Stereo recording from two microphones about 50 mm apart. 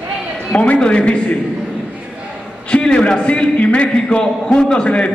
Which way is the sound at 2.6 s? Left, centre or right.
Left.